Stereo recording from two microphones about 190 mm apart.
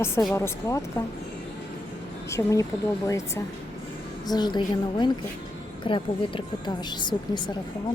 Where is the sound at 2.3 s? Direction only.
15° left (ahead or behind).